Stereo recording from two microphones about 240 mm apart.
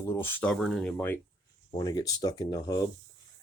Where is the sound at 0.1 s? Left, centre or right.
Centre.